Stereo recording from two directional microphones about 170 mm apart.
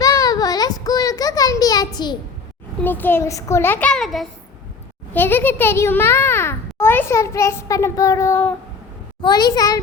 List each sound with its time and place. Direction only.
0.0 s a sound: 20° left (ahead or behind)
2.8 s a child's voice: 10° left (ahead or behind)
5.1 s a child's voice: 10° left (ahead or behind)